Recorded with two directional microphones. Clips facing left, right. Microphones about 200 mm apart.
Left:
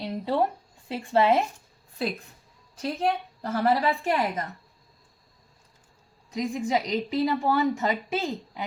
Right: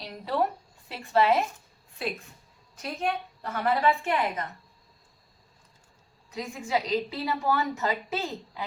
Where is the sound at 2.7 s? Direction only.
35° left (ahead or behind).